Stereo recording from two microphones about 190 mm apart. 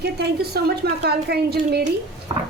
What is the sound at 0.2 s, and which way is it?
A woman's voice, 60° right (ahead or behind).